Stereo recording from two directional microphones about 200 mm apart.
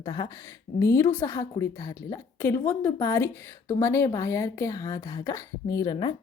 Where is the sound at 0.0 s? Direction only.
20° left (ahead or behind).